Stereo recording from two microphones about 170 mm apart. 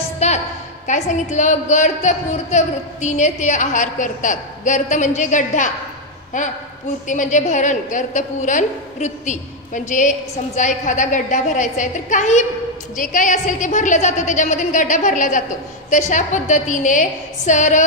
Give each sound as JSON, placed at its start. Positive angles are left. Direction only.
{"t": 0.2, "sound": "a sound", "side_deg": 40}
{"t": 0.8, "sound": "a woman's voice", "side_deg": 45}
{"t": 7.1, "sound": "a woman's voice", "side_deg": 45}